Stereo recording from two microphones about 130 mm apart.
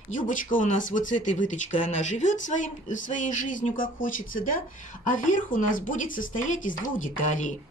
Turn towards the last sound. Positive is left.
turn(degrees=80)